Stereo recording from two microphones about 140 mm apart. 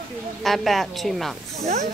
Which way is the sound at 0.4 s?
Centre (ahead or behind).